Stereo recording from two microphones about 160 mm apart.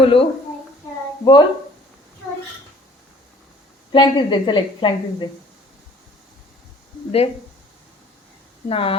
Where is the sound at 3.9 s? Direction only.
30° left (ahead or behind).